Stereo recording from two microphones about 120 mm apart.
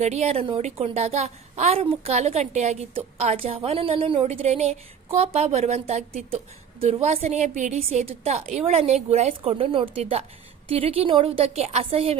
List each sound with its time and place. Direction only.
0.0 s a woman's voice: 65° right (ahead or behind)
3.2 s a woman's voice: 60° right (ahead or behind)
6.9 s a woman's voice: 60° right (ahead or behind); by 7.8 s 80° right
7.8 s a woman's voice: 60° right (ahead or behind)